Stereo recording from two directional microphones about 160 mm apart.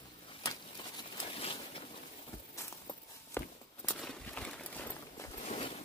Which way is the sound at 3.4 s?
15° left (ahead or behind).